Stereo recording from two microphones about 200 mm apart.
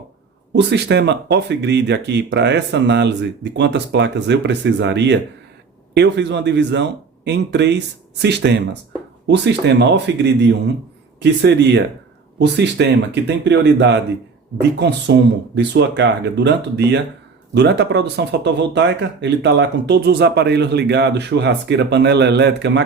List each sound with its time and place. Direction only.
0.5 s speech: 60° right (ahead or behind)